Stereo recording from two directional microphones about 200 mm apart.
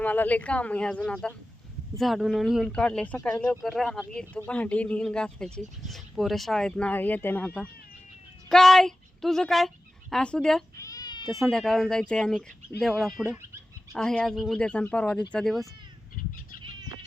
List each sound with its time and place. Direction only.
0.0 s a woman's voice: 10° left (ahead or behind)
10.8 s cat: 15° left (ahead or behind)
11.3 s speech: centre (ahead or behind)
13.2 s speech: 10° right (ahead or behind)
13.9 s speech: 5° left (ahead or behind)